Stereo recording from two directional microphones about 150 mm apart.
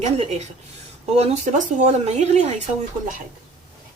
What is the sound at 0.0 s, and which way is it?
Speech, 45° right (ahead or behind).